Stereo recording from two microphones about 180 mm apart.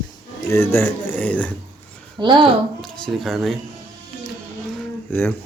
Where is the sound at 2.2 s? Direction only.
30° right (ahead or behind).